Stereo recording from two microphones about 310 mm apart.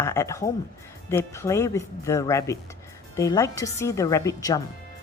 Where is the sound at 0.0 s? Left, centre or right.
Centre.